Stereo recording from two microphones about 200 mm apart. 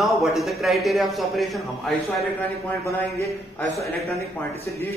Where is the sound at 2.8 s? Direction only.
15° left (ahead or behind).